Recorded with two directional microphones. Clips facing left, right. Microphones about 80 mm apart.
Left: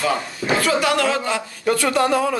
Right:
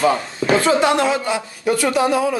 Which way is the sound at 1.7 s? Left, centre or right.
Centre.